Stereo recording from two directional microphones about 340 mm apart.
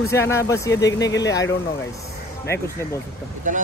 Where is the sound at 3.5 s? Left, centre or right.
Right.